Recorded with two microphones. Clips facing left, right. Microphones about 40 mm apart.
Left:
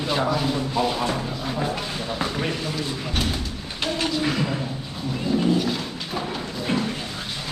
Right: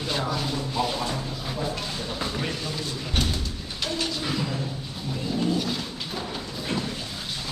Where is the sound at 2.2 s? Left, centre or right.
Left.